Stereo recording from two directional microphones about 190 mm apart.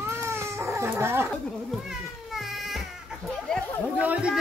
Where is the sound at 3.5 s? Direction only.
5° right (ahead or behind).